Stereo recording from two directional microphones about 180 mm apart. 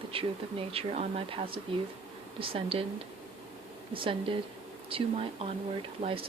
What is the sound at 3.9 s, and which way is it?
A woman's voice, 30° right (ahead or behind).